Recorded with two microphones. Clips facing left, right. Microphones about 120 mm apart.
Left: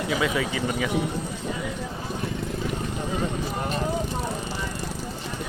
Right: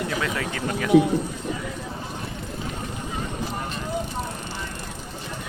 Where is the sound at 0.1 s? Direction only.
5° left (ahead or behind).